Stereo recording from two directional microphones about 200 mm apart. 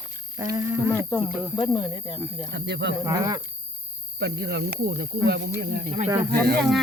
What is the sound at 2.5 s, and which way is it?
Speech, 60° right (ahead or behind).